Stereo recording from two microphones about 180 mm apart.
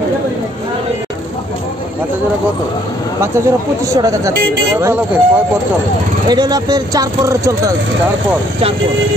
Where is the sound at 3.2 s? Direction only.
15° right (ahead or behind).